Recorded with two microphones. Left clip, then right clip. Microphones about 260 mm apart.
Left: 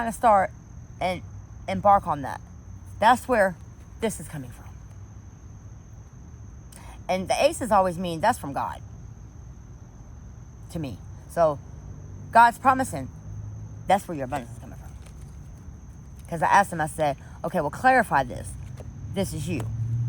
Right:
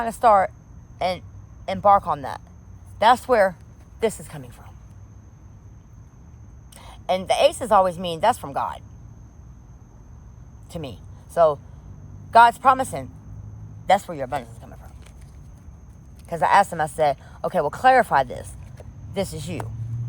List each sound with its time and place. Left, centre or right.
0.0 s speech: right
6.7 s speech: right
10.7 s a sound: right
12.3 s a man's voice: right
16.3 s speech: right